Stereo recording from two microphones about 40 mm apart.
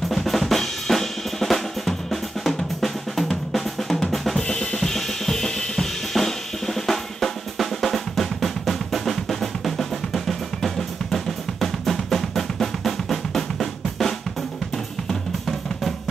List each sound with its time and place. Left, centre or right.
0.1 s drum: centre
4.4 s drum kit: left
15.0 s drum: centre